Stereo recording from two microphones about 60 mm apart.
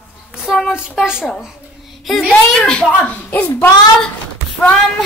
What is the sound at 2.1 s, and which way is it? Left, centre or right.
Speech, centre.